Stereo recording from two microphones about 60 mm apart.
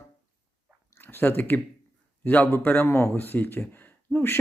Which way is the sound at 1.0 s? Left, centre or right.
Left.